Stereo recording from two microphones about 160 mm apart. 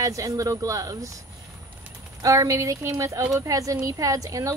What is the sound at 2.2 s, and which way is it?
Speech, 20° right (ahead or behind).